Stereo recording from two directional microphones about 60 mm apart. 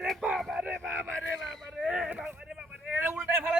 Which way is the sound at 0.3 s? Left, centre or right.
Centre.